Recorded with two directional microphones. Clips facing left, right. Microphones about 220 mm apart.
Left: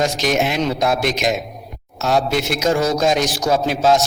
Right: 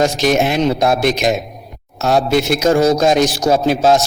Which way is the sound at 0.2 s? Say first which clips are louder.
Right 4 dB; 55° right (ahead or behind).